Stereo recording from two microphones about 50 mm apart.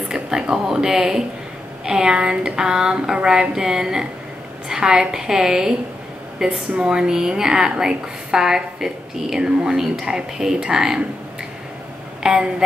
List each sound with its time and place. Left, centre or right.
0.1 s a woman's voice: centre
12.2 s a woman's voice: centre